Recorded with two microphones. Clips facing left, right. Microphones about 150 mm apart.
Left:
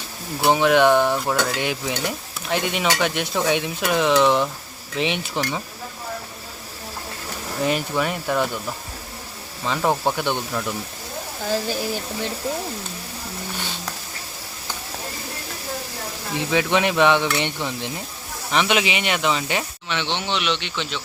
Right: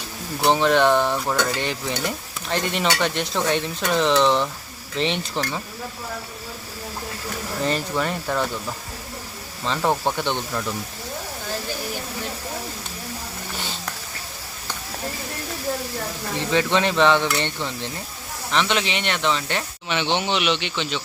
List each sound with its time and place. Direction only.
0.4 s speech: 10° left (ahead or behind)
7.6 s speech: 10° left (ahead or behind)
9.6 s speech: 5° left (ahead or behind)
16.5 s speech: 10° left (ahead or behind)
19.9 s speech: 10° right (ahead or behind)